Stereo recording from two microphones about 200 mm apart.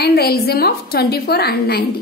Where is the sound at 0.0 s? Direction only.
50° left (ahead or behind).